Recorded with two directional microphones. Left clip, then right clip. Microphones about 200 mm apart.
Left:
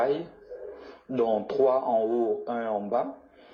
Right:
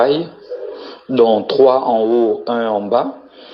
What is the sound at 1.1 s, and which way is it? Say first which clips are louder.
Speech: right 13 dB; 25° right (ahead or behind).